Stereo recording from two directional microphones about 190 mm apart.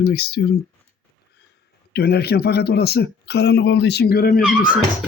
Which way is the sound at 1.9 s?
60° left (ahead or behind).